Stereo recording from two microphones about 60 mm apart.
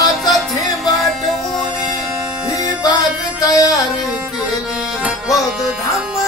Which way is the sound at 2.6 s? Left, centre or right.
Left.